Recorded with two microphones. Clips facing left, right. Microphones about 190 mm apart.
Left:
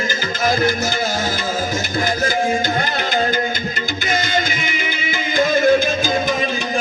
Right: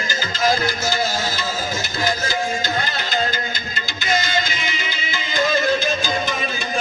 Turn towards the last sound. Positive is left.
turn(degrees=50)  # may be behind; listen again after turning